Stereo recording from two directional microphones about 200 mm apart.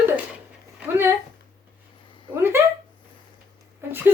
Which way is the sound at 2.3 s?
10° right (ahead or behind).